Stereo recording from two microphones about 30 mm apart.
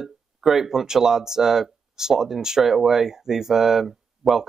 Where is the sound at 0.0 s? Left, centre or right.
Centre.